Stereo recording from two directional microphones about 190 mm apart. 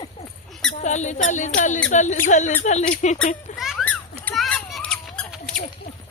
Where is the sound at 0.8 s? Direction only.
40° left (ahead or behind).